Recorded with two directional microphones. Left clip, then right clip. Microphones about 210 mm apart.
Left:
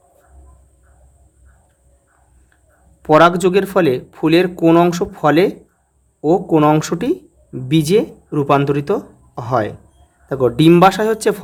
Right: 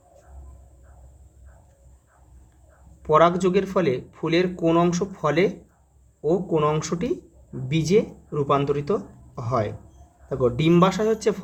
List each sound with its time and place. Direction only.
3.0 s speech: 45° left (ahead or behind)